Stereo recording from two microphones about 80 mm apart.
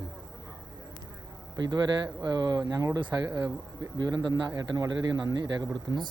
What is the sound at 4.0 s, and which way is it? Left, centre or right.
Speech, right.